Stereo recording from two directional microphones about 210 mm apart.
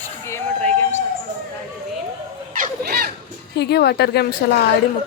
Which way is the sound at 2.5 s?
45° right (ahead or behind).